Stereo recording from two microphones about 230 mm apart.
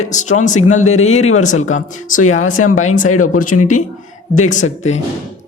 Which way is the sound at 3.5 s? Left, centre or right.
Left.